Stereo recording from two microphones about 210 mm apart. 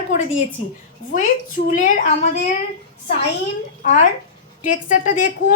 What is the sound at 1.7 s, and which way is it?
Speech, 40° left (ahead or behind).